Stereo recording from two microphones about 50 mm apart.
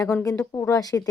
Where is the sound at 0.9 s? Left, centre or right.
Left.